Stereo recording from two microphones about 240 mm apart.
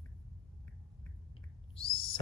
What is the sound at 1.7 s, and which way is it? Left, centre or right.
Owl, left.